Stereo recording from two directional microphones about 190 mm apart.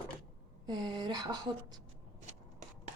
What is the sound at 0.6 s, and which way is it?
Speech, 20° right (ahead or behind).